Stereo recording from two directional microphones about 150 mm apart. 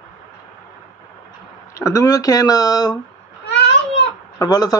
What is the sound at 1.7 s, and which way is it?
Speech, 20° left (ahead or behind).